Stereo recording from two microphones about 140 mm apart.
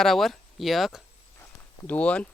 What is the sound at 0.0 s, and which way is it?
Speech, centre (ahead or behind).